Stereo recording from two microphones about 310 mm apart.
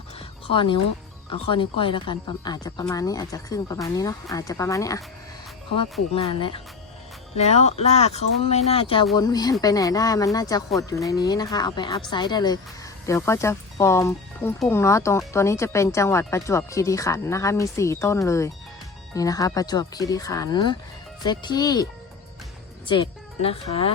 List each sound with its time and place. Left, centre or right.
0.2 s a sound: centre
1.3 s speech: centre
22.9 s speech: centre